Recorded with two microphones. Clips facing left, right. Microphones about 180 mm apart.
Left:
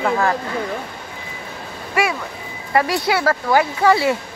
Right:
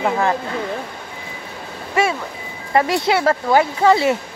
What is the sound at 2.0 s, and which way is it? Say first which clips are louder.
Vehicle: right 2 dB; 25° right (ahead or behind).